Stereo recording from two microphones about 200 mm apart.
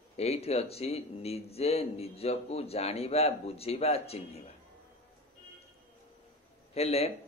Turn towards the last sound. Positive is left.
turn(degrees=30)  # may be behind; listen again after turning